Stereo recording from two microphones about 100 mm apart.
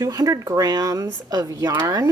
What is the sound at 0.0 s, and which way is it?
A woman's voice, 35° right (ahead or behind).